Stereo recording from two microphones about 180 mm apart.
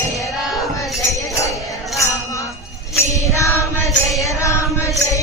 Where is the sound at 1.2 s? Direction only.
20° left (ahead or behind).